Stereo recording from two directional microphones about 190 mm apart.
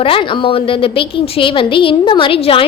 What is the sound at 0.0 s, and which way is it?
A woman's voice, 25° left (ahead or behind).